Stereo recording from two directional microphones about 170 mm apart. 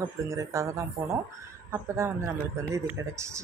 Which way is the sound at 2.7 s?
15° right (ahead or behind).